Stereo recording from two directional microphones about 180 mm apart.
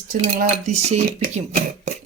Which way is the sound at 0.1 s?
45° right (ahead or behind).